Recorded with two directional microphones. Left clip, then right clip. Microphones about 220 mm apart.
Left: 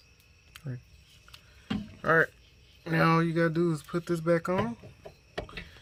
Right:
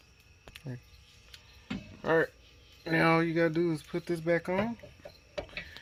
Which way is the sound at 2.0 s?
20° left (ahead or behind).